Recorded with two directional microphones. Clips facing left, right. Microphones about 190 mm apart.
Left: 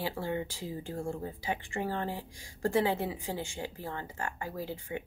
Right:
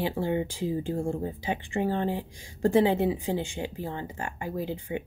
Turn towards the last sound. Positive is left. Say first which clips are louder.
# right 6 dB
turn(degrees=-20)  # may be behind; listen again after turning